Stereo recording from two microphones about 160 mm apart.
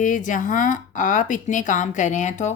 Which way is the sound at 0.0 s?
55° left (ahead or behind).